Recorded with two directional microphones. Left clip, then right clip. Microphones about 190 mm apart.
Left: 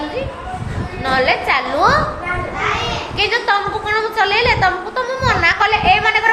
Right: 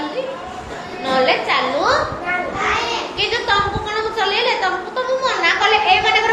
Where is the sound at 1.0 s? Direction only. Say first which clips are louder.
Left 1 dB; 45° left (ahead or behind).